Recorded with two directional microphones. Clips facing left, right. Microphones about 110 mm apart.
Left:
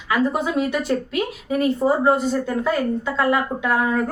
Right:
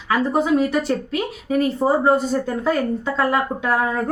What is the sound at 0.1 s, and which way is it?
A woman's voice, 35° right (ahead or behind).